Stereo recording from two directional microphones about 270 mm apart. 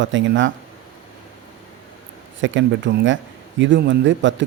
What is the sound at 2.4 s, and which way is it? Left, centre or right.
A man's voice, right.